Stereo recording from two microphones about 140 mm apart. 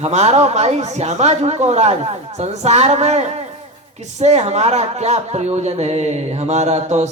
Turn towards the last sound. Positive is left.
turn(degrees=-50)  # may be behind; listen again after turning